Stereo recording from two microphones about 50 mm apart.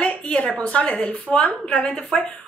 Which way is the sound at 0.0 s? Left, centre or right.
Left.